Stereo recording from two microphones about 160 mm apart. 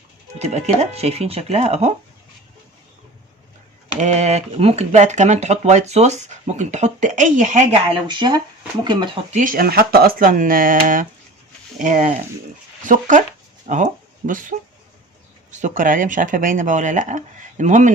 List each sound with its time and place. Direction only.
0.3 s speech: 45° right (ahead or behind)
4.0 s speech: 45° right (ahead or behind)
8.0 s speech: 30° right (ahead or behind)
9.3 s speech: 55° right (ahead or behind)
15.5 s speech: 55° right (ahead or behind)